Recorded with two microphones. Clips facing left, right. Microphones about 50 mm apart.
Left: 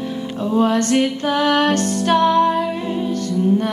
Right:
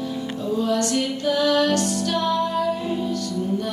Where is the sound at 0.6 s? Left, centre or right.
Left.